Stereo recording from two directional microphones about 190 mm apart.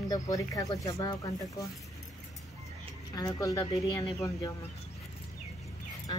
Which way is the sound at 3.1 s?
20° left (ahead or behind).